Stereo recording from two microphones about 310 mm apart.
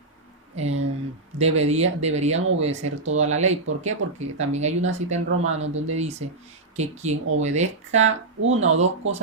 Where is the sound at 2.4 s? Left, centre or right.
Right.